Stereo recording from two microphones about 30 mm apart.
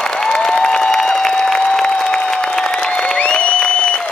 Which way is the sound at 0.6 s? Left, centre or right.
Left.